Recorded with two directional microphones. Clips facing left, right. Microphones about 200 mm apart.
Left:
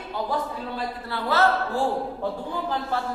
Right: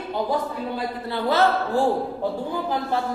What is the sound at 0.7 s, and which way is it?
Speech, 15° right (ahead or behind).